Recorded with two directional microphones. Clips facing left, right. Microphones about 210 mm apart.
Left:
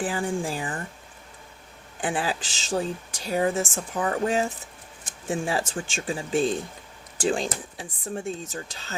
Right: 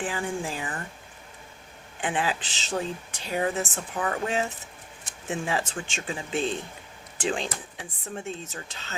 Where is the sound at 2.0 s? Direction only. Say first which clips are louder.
Left 1 dB; 35° left (ahead or behind).